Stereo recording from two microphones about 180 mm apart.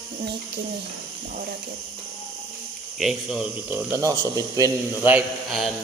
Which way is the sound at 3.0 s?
Centre (ahead or behind).